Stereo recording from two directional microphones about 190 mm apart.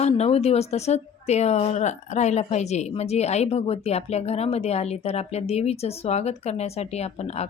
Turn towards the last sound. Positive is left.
turn(degrees=35)  # may be behind; listen again after turning